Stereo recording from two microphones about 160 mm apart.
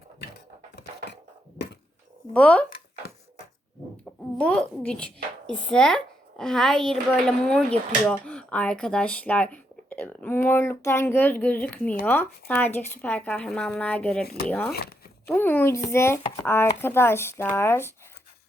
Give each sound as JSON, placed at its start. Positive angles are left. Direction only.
{"t": 0.8, "sound": "a sound", "side_deg": 90}
{"t": 2.3, "sound": "speech", "side_deg": 10}
{"t": 4.4, "sound": "a woman's voice", "side_deg": 5}
{"t": 14.7, "sound": "speech", "side_deg": 75}
{"t": 15.3, "sound": "speech", "side_deg": 10}